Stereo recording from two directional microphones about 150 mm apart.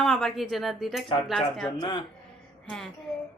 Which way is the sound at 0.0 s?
Centre (ahead or behind).